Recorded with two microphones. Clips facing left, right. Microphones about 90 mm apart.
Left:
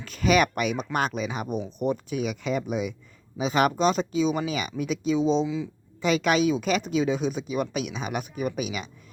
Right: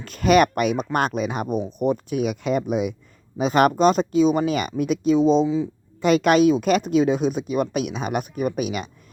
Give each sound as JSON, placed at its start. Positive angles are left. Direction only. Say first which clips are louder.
{"t": 0.0, "sound": "a woman's voice", "louder": "right 5 dB", "side_deg": -50}